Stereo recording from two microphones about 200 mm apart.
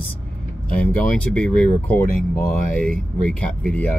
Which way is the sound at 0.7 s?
5° left (ahead or behind).